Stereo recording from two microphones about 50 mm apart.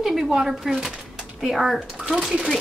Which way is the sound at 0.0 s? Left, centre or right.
Centre.